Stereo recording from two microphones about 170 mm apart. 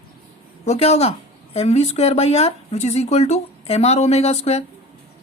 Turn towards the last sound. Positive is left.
turn(degrees=40)  # may be behind; listen again after turning